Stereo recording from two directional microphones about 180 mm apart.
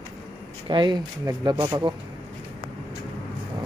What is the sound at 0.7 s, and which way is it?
Speech, 25° right (ahead or behind).